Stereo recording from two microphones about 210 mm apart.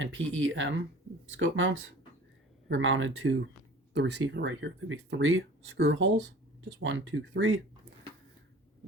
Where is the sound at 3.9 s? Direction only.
55° right (ahead or behind).